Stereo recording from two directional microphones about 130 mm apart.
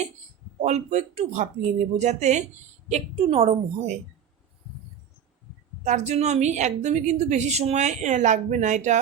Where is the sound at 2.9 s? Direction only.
50° right (ahead or behind).